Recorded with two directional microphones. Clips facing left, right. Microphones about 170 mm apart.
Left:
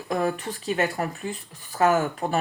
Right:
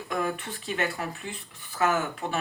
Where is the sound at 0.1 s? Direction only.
35° left (ahead or behind).